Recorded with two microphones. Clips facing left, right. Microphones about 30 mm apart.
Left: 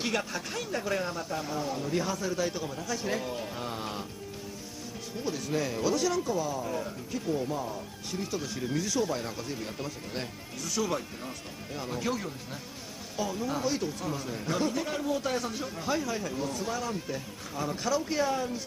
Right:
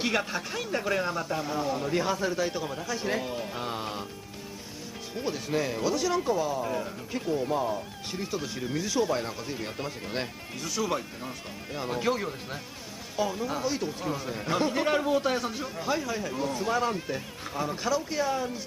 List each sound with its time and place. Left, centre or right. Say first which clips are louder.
0.1 s speech: right 3 dB; centre
2.3 s speech: right 2 dB; centre
5.2 s speech: right 2 dB; centre
6.3 s speech: right 3 dB; right
8.3 s speech: right 1 dB; centre
10.7 s speech: right 1 dB; centre
11.8 s speech: right 4 dB; right; by 13.8 s centre
13.8 s speech: right 2 dB; centre
14.8 s speech: right 5 dB; right; by 16.3 s centre
16.3 s speech: right 5 dB; right
17.6 s speech: right 2 dB; centre
17.9 s speech: left 1 dB; centre